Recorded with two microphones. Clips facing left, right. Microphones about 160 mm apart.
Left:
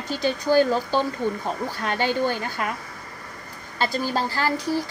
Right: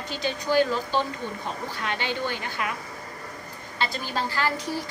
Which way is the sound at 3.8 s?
35° left (ahead or behind).